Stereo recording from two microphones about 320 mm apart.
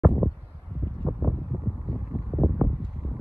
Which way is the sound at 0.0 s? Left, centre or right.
Centre.